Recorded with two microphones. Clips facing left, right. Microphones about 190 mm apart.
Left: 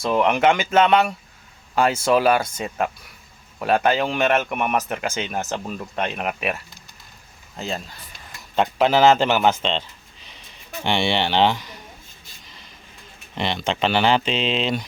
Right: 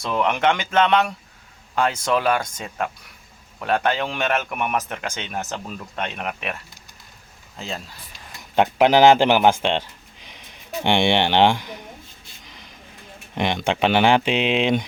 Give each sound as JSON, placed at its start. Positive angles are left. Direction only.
{"t": 0.1, "sound": "speech", "side_deg": 5}
{"t": 8.5, "sound": "speech", "side_deg": -15}
{"t": 10.8, "sound": "speech", "side_deg": -15}
{"t": 12.5, "sound": "a sound", "side_deg": -15}
{"t": 13.3, "sound": "speech", "side_deg": -15}